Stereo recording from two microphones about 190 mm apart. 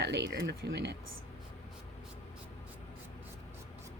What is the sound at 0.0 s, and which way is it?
Speech, 65° right (ahead or behind).